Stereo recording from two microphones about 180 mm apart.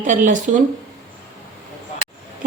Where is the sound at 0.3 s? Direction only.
45° right (ahead or behind).